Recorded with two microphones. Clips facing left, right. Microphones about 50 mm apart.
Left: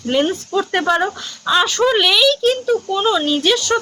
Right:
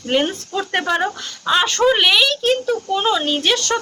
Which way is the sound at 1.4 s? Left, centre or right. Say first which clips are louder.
Left 1 dB; right.